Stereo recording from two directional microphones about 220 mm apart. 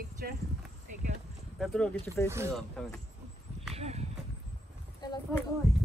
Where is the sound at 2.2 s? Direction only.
10° right (ahead or behind).